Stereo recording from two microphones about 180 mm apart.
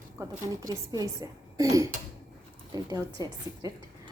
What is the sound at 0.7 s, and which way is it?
Speech, 20° right (ahead or behind).